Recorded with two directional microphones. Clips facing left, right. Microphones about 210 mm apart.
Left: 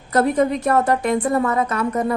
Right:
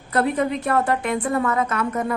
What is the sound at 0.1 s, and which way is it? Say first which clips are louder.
A woman's voice: left 4 dB; 40° left (ahead or behind).